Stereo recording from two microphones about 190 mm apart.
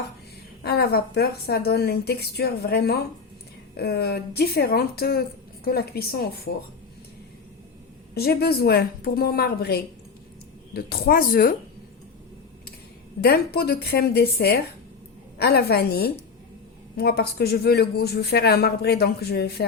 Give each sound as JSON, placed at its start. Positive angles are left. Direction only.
{"t": 0.6, "sound": "speech", "side_deg": 55}
{"t": 8.1, "sound": "speech", "side_deg": 55}
{"t": 13.2, "sound": "speech", "side_deg": 55}